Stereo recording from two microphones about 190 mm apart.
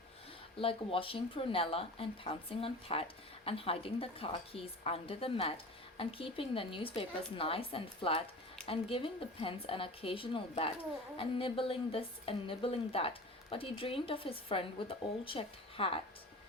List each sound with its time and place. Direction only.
0.6 s speech: 30° left (ahead or behind)